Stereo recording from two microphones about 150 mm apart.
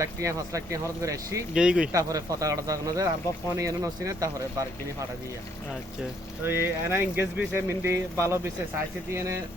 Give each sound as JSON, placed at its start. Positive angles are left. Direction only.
{"t": 0.0, "sound": "speech", "side_deg": -20}
{"t": 1.5, "sound": "speech", "side_deg": -5}
{"t": 1.9, "sound": "speech", "side_deg": -20}
{"t": 6.4, "sound": "speech", "side_deg": -15}